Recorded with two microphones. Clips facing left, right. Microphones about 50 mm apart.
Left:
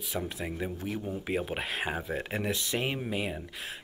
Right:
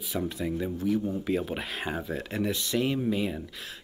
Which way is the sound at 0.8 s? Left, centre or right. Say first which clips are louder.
Right 11 dB; left.